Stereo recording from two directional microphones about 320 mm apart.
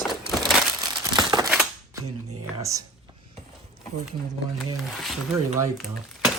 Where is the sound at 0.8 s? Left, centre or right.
Centre.